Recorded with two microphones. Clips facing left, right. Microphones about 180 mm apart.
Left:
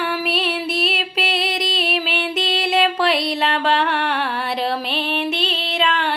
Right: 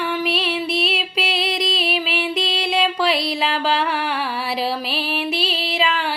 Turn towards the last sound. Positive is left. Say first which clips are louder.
# left 1 dB
turn(degrees=0)  # may be behind; listen again after turning